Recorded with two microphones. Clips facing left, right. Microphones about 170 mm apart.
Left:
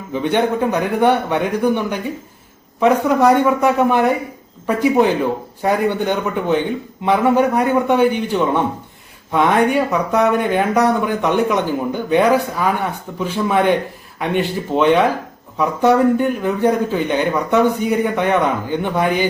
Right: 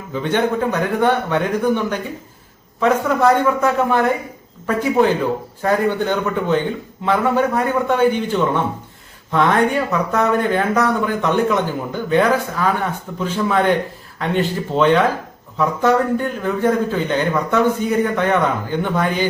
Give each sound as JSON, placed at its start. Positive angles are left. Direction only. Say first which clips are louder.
{"t": 0.1, "sound": "speech", "louder": "left 2 dB", "side_deg": 15}